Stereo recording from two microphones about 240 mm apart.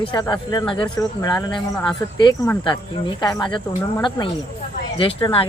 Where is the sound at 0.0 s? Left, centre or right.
Centre.